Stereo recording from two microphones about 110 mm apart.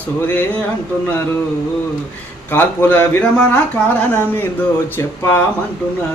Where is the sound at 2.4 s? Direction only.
15° left (ahead or behind).